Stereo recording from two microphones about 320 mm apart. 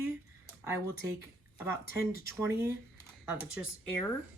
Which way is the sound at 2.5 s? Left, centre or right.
Centre.